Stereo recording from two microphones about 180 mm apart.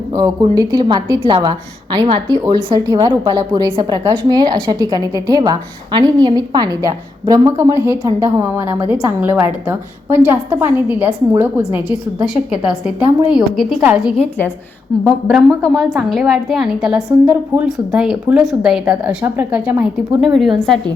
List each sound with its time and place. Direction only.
0.2 s a woman's voice: 20° right (ahead or behind)
14.2 s a woman's voice: 10° left (ahead or behind)